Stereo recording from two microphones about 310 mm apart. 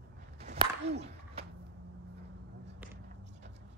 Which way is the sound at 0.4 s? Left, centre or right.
Centre.